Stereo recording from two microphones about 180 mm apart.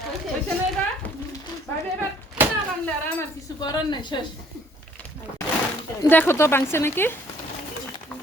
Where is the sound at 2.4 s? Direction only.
10° right (ahead or behind).